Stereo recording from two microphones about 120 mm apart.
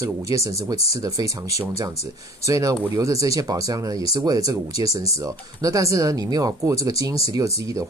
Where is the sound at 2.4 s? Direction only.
30° right (ahead or behind).